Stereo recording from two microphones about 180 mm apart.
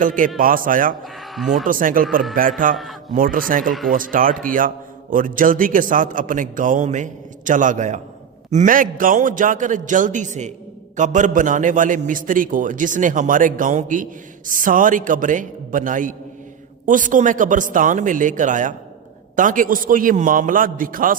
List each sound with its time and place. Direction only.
0.0 s a man's voice: 45° right (ahead or behind)
1.0 s speech: centre (ahead or behind)
1.6 s a man's voice: 50° right (ahead or behind)
3.7 s speech: centre (ahead or behind)
3.9 s a man's voice: 50° right (ahead or behind)